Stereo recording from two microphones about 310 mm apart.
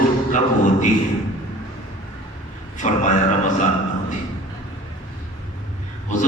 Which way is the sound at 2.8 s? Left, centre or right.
Left.